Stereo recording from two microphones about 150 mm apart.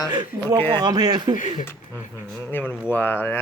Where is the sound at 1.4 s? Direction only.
60° left (ahead or behind).